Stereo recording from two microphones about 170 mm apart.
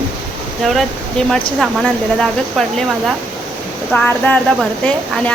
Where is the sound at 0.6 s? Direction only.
Centre (ahead or behind).